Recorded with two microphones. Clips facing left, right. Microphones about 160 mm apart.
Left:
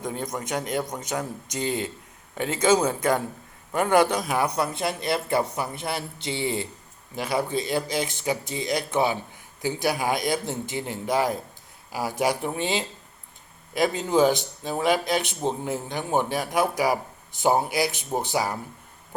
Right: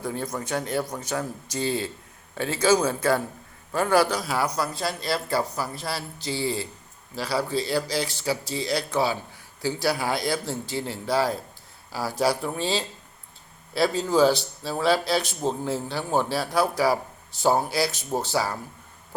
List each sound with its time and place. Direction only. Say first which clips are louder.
0.0 s a man's voice: even; 20° left (ahead or behind)